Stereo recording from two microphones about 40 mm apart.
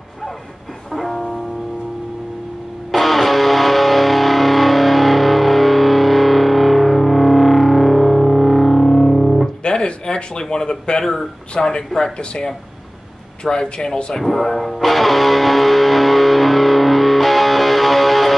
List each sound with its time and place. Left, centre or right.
0.9 s music: centre
2.9 s music: centre
9.8 s a sound: left
11.6 s speech: centre
14.1 s music: centre